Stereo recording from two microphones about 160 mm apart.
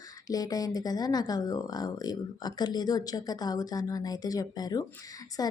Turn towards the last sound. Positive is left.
turn(degrees=20)  # may be behind; listen again after turning